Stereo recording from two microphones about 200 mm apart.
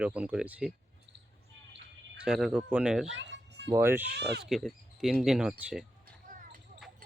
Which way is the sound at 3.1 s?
65° right (ahead or behind).